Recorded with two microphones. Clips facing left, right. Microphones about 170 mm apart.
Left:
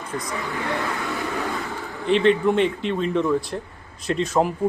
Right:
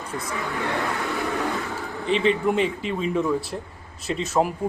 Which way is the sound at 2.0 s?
Centre (ahead or behind).